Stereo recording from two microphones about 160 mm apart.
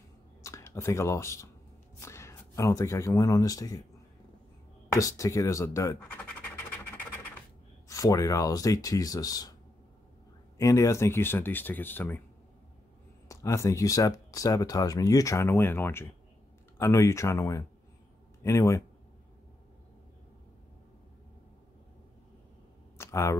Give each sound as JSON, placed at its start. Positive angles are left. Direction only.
{"t": 0.4, "sound": "speech", "side_deg": 20}
{"t": 4.9, "sound": "speech", "side_deg": 20}
{"t": 6.2, "sound": "scratch", "side_deg": 10}
{"t": 7.9, "sound": "speech", "side_deg": 20}
{"t": 10.6, "sound": "speech", "side_deg": 20}
{"t": 13.3, "sound": "speech", "side_deg": 20}
{"t": 22.9, "sound": "a sound", "side_deg": 15}